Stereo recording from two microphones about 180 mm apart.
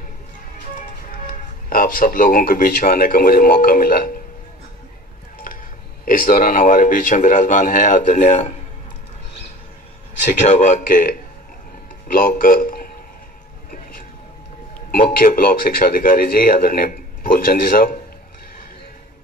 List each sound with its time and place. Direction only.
1.2 s speech: 55° left (ahead or behind)
6.0 s speech: 50° left (ahead or behind)
10.5 s speech: 45° left (ahead or behind)
15.0 s speech: 50° left (ahead or behind)